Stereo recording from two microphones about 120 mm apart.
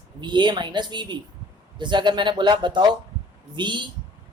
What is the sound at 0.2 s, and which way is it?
Speech, 40° right (ahead or behind).